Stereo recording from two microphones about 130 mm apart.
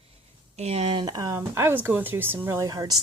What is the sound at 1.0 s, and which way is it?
Speech, 30° right (ahead or behind).